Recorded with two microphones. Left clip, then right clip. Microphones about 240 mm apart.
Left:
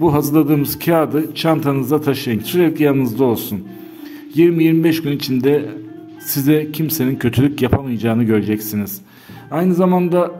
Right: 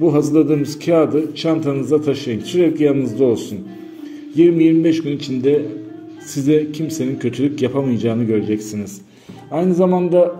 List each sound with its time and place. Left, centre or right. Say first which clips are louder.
0.0 s a man's voice: even; left
9.8 s a man's voice: even; left